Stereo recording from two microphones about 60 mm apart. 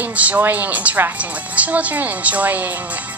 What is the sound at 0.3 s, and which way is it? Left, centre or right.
A woman's voice, right.